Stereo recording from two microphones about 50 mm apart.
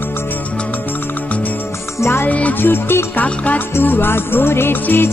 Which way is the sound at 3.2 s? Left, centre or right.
Left.